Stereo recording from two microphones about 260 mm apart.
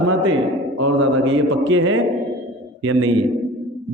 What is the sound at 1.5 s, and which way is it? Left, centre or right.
A man's voice, right.